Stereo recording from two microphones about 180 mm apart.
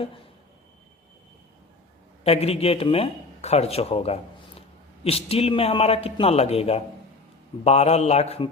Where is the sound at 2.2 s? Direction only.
35° left (ahead or behind).